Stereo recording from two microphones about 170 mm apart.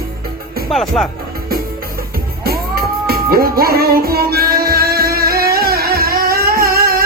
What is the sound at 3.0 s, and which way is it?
Music, 60° right (ahead or behind).